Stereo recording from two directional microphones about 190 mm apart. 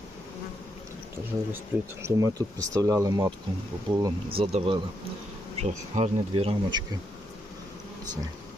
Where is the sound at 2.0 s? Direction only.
15° right (ahead or behind).